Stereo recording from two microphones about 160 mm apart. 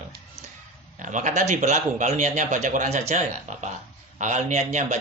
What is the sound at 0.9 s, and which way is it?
A man's voice, 50° right (ahead or behind).